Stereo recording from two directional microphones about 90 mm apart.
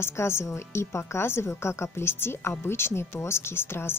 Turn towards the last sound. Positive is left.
turn(degrees=25)  # may be behind; listen again after turning